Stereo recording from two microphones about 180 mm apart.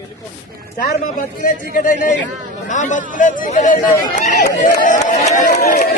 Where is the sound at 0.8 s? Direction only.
50° left (ahead or behind).